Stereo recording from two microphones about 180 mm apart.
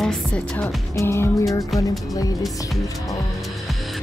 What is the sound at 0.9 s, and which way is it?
Music, 15° left (ahead or behind).